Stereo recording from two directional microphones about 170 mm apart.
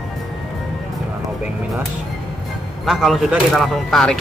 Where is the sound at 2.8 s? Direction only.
Centre (ahead or behind).